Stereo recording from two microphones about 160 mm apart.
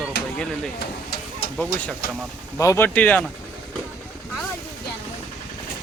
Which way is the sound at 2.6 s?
15° left (ahead or behind).